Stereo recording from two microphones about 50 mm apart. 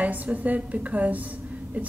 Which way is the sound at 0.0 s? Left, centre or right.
Right.